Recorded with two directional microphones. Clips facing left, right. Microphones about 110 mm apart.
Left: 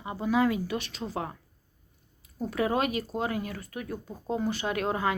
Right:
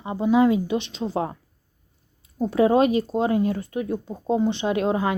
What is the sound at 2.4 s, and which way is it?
A woman's voice, 25° right (ahead or behind).